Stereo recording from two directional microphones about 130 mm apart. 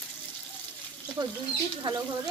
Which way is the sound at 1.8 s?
30° right (ahead or behind).